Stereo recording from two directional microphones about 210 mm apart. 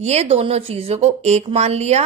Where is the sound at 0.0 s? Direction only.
30° right (ahead or behind).